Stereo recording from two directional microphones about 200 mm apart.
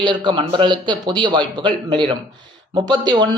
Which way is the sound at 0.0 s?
25° right (ahead or behind).